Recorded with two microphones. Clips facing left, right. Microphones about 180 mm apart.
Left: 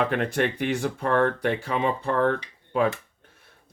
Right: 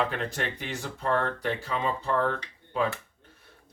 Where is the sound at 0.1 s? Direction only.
65° left (ahead or behind).